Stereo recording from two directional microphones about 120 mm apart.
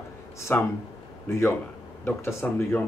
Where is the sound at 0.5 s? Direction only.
15° left (ahead or behind).